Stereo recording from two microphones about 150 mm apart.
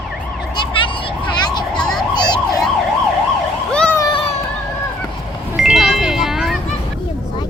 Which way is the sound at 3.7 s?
5° left (ahead or behind).